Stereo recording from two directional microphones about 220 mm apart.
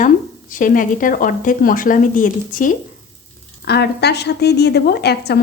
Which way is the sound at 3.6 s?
50° left (ahead or behind).